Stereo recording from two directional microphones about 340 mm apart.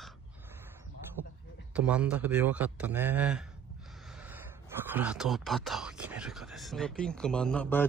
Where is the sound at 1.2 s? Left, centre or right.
Right.